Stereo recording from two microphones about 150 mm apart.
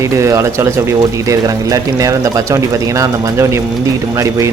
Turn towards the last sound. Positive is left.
turn(degrees=-20)  # may be behind; listen again after turning